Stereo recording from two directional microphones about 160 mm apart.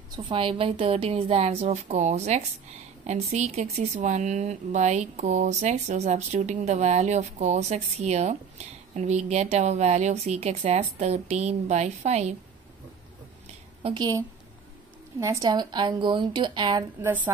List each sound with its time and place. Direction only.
0.1 s a woman's voice: 30° right (ahead or behind)
13.8 s speech: 25° right (ahead or behind)
17.0 s a woman's voice: 10° right (ahead or behind)